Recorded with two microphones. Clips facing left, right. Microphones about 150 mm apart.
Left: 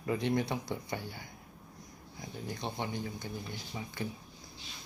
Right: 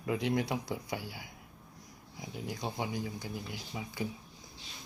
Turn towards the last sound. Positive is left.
turn(degrees=-10)  # may be behind; listen again after turning